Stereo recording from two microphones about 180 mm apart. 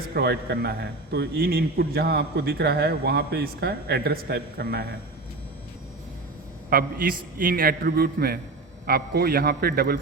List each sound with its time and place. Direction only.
0.1 s a man's voice: 65° right (ahead or behind)
6.7 s a man's voice: 55° right (ahead or behind)